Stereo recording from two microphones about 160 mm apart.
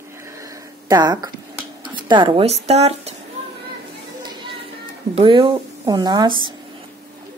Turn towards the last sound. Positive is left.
turn(degrees=-25)  # may be behind; listen again after turning